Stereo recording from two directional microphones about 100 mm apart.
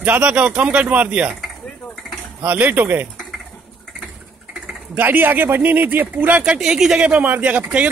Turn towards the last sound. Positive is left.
turn(degrees=-15)  # may be behind; listen again after turning